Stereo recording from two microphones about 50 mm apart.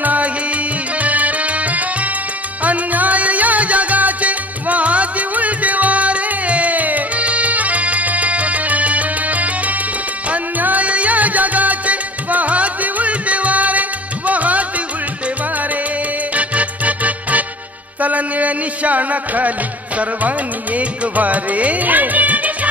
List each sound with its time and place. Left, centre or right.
0.0 s music: right
16.3 s music: right